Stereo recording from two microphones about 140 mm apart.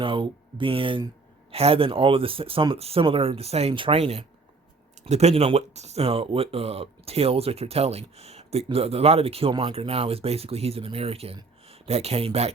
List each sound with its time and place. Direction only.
0.0 s speech: 35° right (ahead or behind)